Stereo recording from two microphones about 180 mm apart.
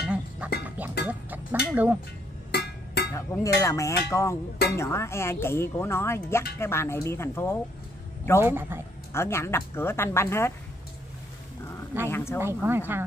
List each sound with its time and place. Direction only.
0.0 s music: 5° right (ahead or behind)
1.0 s a sound: 10° right (ahead or behind)
2.5 s a sound: 60° left (ahead or behind)
3.1 s speech: 15° left (ahead or behind)
8.4 s speech: 15° right (ahead or behind)
9.1 s speech: 15° left (ahead or behind)
11.9 s speech: 10° right (ahead or behind)